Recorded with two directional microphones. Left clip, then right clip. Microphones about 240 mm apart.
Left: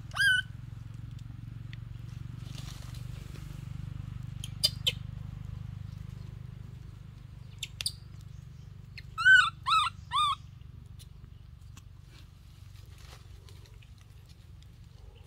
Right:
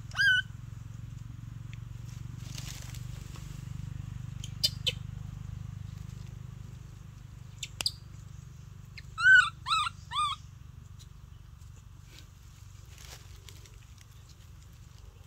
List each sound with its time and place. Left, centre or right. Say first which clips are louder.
0.1 s cat: right 1 dB; centre
2.4 s crushing: right 4 dB; right
4.4 s a sound: left 1 dB; centre
7.6 s bird: left 1 dB; centre
8.9 s dog: even; centre